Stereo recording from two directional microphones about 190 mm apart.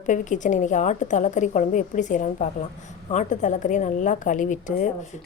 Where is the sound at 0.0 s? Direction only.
40° left (ahead or behind).